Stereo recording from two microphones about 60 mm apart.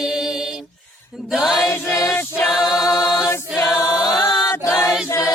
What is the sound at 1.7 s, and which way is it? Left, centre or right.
Choir, left.